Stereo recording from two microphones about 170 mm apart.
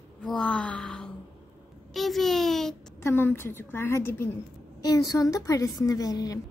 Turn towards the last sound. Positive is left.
turn(degrees=20)  # may be behind; listen again after turning